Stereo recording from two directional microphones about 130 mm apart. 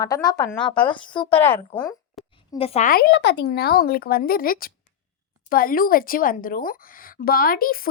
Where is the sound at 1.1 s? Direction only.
40° left (ahead or behind).